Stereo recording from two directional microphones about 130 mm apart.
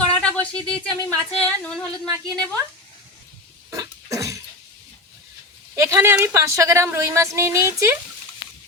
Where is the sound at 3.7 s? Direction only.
25° right (ahead or behind).